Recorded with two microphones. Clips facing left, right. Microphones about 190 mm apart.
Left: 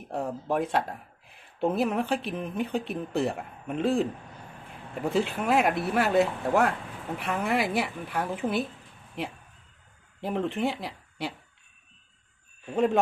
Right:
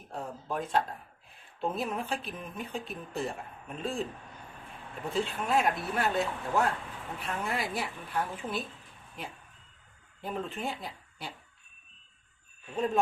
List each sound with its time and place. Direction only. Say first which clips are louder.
0.1 s speech: left 7 dB; 70° left (ahead or behind)
5.0 s speech: left 6 dB; 75° left (ahead or behind)
10.2 s speech: left 7 dB; 75° left (ahead or behind)
12.7 s speech: left 6 dB; 70° left (ahead or behind)